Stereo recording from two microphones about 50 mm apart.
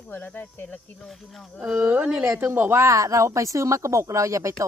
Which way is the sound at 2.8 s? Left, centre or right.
Right.